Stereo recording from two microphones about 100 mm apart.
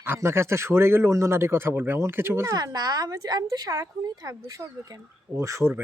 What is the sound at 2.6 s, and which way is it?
Speech, 45° right (ahead or behind).